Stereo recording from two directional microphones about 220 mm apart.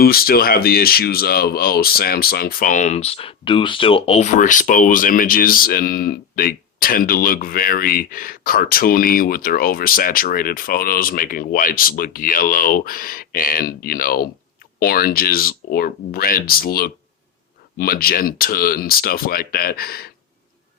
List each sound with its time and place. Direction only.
0.0 s speech: 45° left (ahead or behind)